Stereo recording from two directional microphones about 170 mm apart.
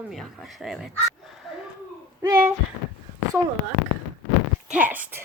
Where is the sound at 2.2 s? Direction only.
15° right (ahead or behind).